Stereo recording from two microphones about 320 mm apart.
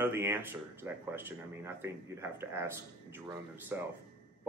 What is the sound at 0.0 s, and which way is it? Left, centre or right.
A man's voice, centre.